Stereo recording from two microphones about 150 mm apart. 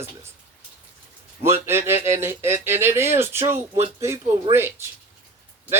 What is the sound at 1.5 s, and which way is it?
Speech, 15° right (ahead or behind).